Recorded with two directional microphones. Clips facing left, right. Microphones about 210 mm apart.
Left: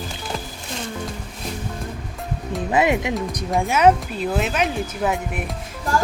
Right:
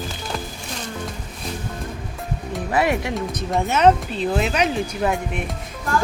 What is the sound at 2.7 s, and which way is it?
Speech, 20° left (ahead or behind).